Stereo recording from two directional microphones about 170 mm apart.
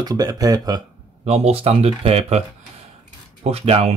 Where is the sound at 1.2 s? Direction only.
40° right (ahead or behind).